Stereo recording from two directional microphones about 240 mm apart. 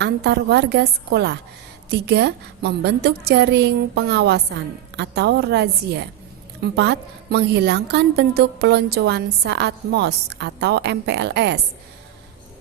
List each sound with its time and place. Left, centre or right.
0.0 s a woman's voice: right